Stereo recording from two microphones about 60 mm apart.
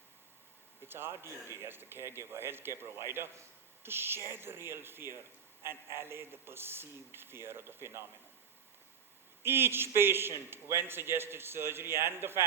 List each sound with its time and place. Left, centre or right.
0.9 s a man's voice: right
9.4 s a man's voice: right